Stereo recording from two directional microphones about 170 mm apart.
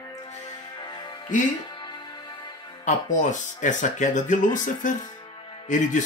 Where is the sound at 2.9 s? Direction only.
45° left (ahead or behind).